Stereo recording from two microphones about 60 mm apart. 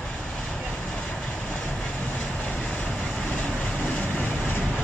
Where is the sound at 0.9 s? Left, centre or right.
Centre.